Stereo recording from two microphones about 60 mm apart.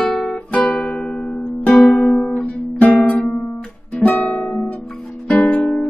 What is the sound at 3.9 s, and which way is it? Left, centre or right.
Guitar, left.